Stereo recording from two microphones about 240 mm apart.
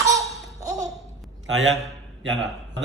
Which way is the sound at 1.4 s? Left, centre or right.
Right.